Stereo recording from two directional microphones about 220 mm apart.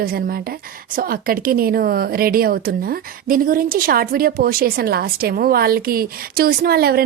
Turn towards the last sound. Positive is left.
turn(degrees=-45)  # may be behind; listen again after turning